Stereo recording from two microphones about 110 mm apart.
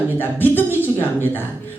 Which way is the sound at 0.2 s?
20° left (ahead or behind).